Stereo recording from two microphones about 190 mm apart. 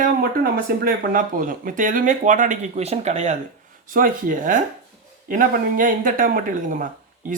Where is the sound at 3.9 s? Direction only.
45° right (ahead or behind).